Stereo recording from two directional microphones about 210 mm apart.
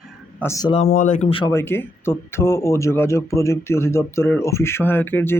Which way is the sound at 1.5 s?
10° left (ahead or behind).